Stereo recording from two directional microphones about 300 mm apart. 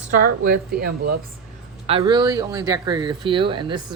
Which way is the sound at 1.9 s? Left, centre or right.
Centre.